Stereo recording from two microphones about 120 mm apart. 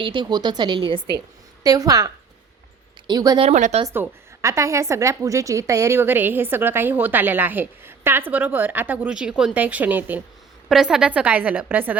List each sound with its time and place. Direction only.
0.0 s speech: 40° right (ahead or behind)
1.6 s speech: 30° right (ahead or behind)
3.4 s speech: 70° right (ahead or behind)
3.9 s a woman's voice: 20° right (ahead or behind)